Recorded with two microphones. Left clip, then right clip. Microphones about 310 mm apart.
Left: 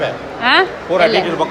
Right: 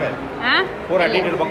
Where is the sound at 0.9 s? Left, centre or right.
Left.